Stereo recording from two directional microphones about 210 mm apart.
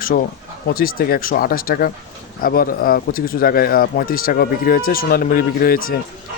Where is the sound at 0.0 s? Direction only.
45° left (ahead or behind).